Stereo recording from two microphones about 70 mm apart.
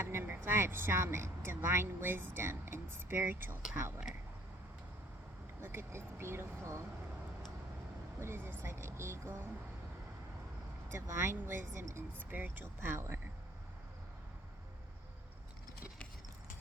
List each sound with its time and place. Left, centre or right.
0.0 s speech: right
5.5 s speech: right
8.2 s speech: right
10.9 s speech: right
12.3 s speech: right